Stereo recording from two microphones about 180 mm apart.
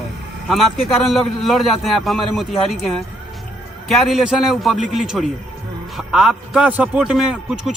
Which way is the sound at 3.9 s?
Centre (ahead or behind).